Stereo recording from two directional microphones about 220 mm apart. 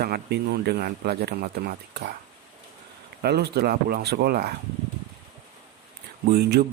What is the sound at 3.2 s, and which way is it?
Speech, 45° right (ahead or behind).